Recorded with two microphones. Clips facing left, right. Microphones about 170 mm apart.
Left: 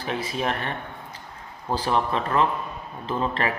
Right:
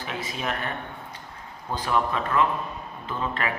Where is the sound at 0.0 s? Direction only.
35° left (ahead or behind).